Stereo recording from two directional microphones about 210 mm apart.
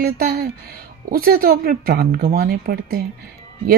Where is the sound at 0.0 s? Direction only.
40° right (ahead or behind).